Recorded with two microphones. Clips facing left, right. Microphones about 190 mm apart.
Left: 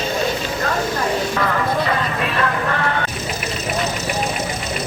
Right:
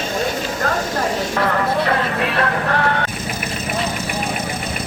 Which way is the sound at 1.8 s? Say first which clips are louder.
Right 2 dB; 65° right (ahead or behind).